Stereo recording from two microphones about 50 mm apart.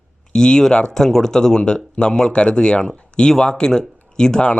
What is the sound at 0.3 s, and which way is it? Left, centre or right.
Speech, centre.